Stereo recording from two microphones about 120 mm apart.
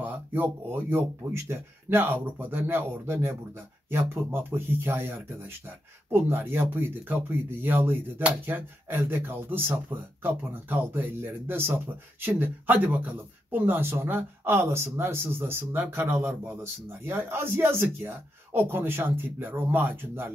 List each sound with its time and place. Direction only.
0.0 s speech: 15° right (ahead or behind)